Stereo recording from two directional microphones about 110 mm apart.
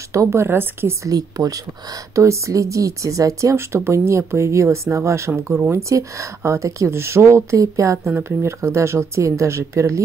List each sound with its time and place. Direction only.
0.1 s speech: 25° right (ahead or behind)